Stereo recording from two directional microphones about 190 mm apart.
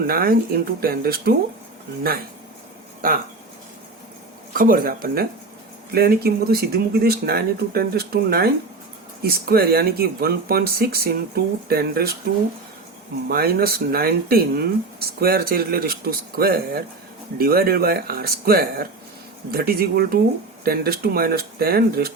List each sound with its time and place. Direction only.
0.1 s speech: 50° right (ahead or behind)
3.0 s speech: 50° right (ahead or behind)
4.5 s speech: 45° right (ahead or behind)
13.2 s speech: 55° right (ahead or behind)